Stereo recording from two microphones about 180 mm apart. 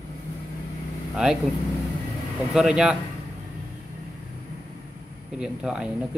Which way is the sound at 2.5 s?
5° right (ahead or behind).